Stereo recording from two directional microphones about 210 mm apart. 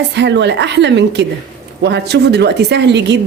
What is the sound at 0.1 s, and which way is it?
A woman's voice, 55° right (ahead or behind).